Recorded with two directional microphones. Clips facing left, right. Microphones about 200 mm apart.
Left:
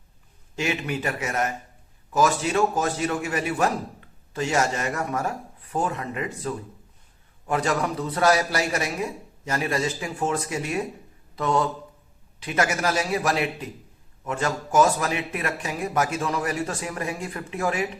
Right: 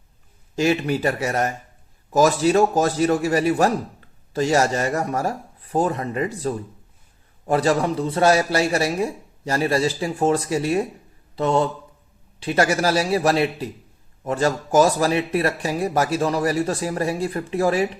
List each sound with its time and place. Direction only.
0.5 s a man's voice: 35° right (ahead or behind)